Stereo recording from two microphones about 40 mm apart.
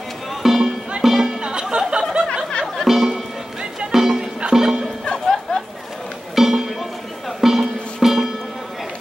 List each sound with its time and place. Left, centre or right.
0.3 s music: centre
1.4 s a sound: right
2.9 s music: centre
5.2 s music: centre
6.3 s music: centre